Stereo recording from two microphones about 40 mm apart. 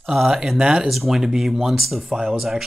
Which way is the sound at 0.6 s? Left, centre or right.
Right.